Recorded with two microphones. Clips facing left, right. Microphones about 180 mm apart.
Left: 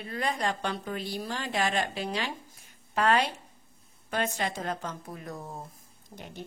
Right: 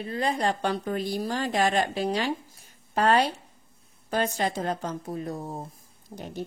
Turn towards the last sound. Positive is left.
turn(degrees=-35)  # may be behind; listen again after turning